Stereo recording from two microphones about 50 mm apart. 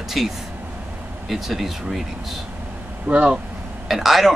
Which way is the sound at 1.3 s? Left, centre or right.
Centre.